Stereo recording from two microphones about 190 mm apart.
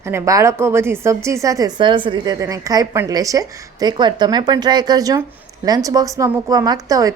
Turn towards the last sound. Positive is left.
turn(degrees=-20)  # may be behind; listen again after turning